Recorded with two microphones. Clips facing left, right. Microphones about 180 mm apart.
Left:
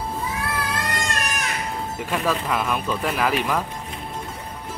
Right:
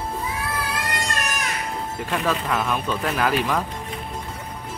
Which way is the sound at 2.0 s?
Centre (ahead or behind).